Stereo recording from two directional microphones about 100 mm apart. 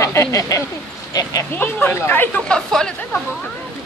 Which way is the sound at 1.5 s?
20° left (ahead or behind).